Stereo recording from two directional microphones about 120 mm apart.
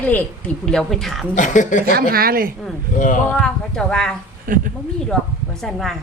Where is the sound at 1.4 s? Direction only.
90° left.